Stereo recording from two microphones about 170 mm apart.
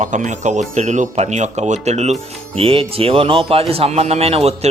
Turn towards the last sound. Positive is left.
turn(degrees=-35)  # may be behind; listen again after turning